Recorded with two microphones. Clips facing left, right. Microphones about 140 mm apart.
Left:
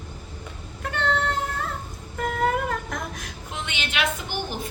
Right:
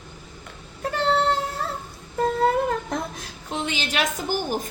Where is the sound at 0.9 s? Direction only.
35° right (ahead or behind).